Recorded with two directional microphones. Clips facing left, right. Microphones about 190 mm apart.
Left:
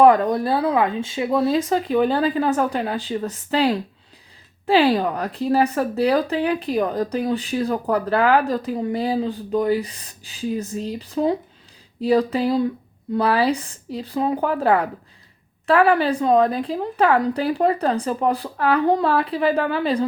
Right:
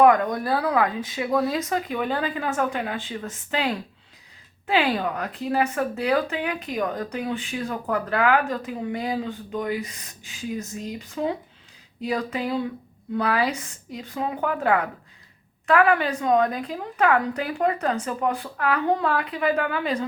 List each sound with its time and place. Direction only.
0.0 s speech: 30° left (ahead or behind)